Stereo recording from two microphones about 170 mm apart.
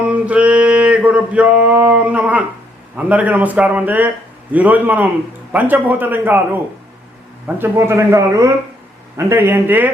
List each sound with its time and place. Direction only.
0.0 s male singing: 10° right (ahead or behind)
2.9 s a man's voice: 10° right (ahead or behind)